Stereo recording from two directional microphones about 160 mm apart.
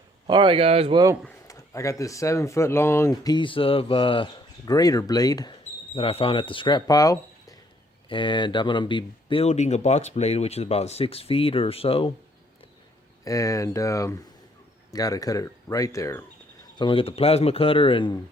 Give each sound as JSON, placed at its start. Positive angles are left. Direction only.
{"t": 0.3, "sound": "speech", "side_deg": -30}
{"t": 1.5, "sound": "speech", "side_deg": 20}
{"t": 5.9, "sound": "speech", "side_deg": 35}
{"t": 13.2, "sound": "speech", "side_deg": 20}
{"t": 16.7, "sound": "speech", "side_deg": 30}